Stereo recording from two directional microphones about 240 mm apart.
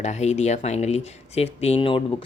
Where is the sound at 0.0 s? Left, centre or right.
Left.